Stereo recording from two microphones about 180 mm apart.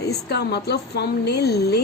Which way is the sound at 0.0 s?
65° left (ahead or behind).